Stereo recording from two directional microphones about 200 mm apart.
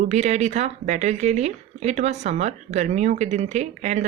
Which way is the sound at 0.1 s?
35° right (ahead or behind).